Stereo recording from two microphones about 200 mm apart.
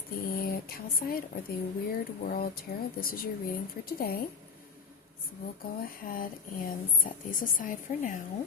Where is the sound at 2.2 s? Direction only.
50° left (ahead or behind).